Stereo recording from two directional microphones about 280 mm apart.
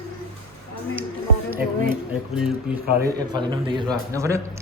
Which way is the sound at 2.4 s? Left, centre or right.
Centre.